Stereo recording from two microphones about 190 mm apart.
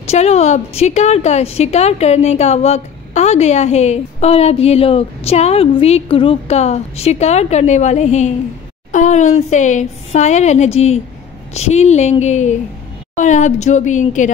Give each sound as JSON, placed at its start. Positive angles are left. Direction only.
{"t": 0.0, "sound": "a woman's voice", "side_deg": 35}